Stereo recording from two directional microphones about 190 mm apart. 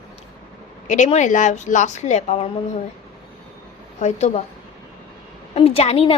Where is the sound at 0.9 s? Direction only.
40° left (ahead or behind).